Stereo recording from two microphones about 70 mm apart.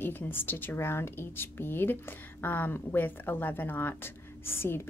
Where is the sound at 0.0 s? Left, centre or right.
Left.